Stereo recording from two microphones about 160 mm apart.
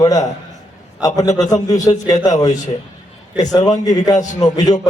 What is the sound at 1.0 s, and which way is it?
Speech, 20° left (ahead or behind).